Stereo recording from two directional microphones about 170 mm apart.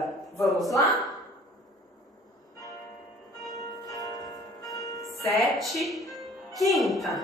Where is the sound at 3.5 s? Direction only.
20° left (ahead or behind).